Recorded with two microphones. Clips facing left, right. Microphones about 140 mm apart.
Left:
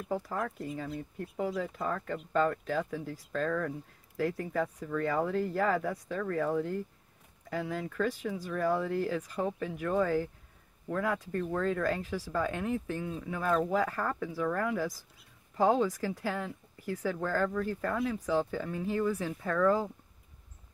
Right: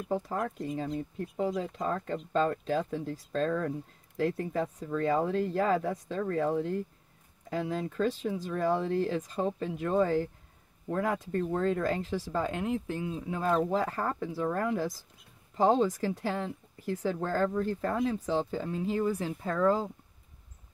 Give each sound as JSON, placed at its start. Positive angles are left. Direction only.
{"t": 0.1, "sound": "speech", "side_deg": -20}